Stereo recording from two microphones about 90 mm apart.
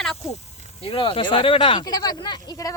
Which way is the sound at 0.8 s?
85° left.